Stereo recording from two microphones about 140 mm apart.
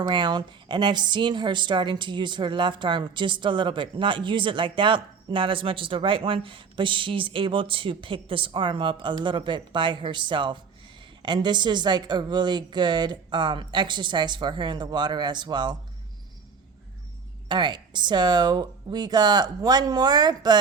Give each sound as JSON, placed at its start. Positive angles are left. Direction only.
{"t": 0.1, "sound": "a woman's voice", "side_deg": -35}
{"t": 17.5, "sound": "speech", "side_deg": -30}